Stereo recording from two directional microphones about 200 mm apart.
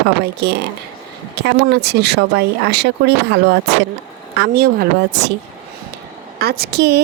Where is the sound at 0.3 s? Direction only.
55° right (ahead or behind).